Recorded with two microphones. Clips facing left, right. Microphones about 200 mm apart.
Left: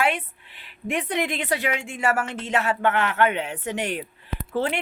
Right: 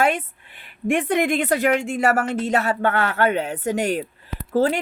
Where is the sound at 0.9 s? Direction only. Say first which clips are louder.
Right 6 dB; 50° right (ahead or behind).